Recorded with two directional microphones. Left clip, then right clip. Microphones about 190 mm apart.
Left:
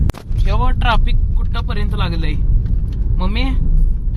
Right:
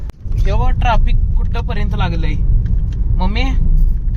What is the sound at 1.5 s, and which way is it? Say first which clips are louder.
Speech: right 1 dB; 20° right (ahead or behind).